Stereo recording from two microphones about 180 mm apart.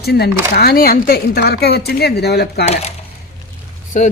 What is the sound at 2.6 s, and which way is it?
Speech, 35° left (ahead or behind).